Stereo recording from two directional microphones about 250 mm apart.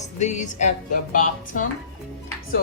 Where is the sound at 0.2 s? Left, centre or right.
Left.